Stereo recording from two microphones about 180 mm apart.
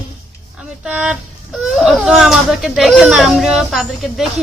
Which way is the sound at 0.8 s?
5° right (ahead or behind).